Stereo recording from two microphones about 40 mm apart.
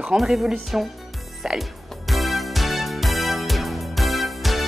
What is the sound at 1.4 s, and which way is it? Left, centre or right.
Music, centre.